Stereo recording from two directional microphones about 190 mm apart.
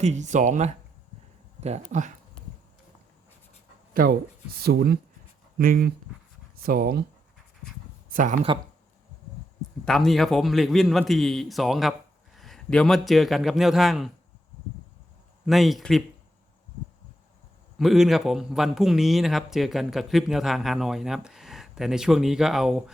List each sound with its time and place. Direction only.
0.0 s speech: 40° right (ahead or behind)
3.9 s speech: 50° right (ahead or behind)
8.1 s speech: 45° right (ahead or behind)
9.8 s speech: centre (ahead or behind)
15.4 s speech: centre (ahead or behind)
17.7 s speech: centre (ahead or behind)